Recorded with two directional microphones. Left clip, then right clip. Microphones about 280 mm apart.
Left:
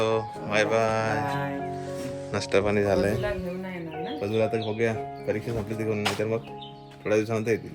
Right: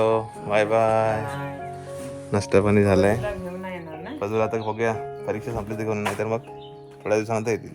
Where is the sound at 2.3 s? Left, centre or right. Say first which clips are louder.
Right 4 dB; right.